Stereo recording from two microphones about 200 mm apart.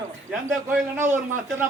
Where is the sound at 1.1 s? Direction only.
40° right (ahead or behind).